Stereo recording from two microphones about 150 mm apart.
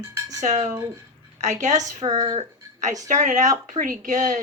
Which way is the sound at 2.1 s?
30° right (ahead or behind).